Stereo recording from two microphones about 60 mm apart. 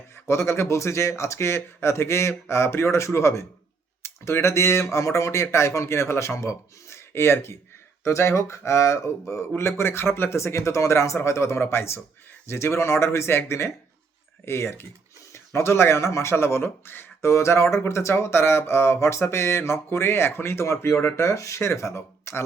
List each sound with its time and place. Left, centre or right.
0.3 s speech: left
7.1 s speech: left